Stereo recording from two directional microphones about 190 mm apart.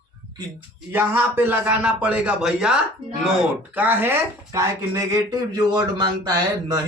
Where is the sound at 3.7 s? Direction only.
10° right (ahead or behind).